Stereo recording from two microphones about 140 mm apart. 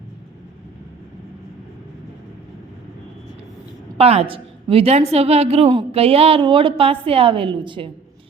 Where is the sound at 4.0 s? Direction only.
45° right (ahead or behind).